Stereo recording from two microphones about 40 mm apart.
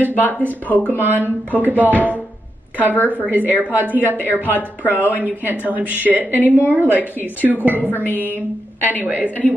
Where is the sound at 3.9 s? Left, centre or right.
Left.